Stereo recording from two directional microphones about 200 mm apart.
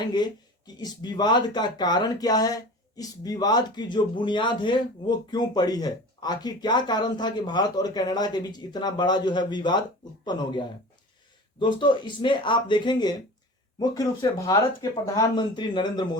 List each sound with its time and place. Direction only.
0.8 s speech: 20° left (ahead or behind)